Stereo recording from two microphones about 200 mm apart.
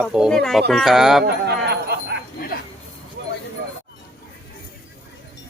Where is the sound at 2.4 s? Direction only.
50° left (ahead or behind).